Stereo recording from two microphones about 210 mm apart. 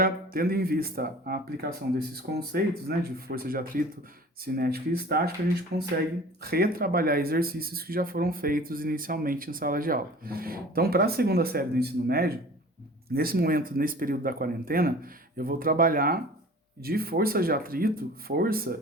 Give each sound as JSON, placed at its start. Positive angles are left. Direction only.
{"t": 0.0, "sound": "speech", "side_deg": -45}